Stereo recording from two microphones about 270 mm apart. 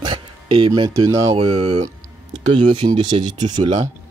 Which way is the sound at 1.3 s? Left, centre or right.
Right.